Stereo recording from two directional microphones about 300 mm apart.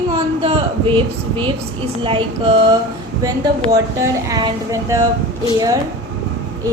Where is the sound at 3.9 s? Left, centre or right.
Centre.